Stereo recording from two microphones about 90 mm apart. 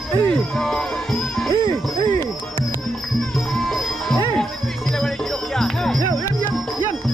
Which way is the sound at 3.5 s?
Centre (ahead or behind).